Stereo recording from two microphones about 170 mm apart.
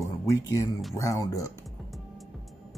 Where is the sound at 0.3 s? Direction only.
20° left (ahead or behind).